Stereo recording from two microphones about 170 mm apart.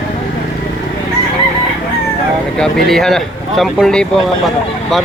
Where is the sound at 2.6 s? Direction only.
5° left (ahead or behind).